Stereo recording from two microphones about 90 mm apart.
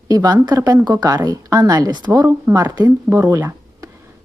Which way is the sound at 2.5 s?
40° right (ahead or behind).